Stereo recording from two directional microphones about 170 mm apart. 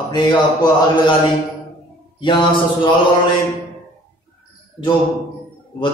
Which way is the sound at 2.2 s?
30° left (ahead or behind).